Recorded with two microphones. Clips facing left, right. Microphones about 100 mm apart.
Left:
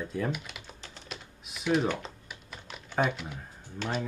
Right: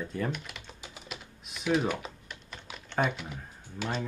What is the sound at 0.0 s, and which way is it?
Speech, centre (ahead or behind).